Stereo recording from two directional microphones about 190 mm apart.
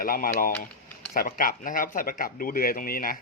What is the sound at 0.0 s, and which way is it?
Speech, 50° left (ahead or behind).